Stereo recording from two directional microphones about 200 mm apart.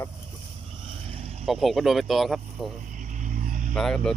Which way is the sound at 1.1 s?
30° right (ahead or behind).